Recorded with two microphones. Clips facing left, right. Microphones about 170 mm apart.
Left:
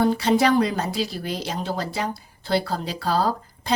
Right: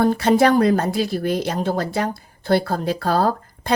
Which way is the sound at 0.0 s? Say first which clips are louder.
Right 3 dB; 50° right (ahead or behind).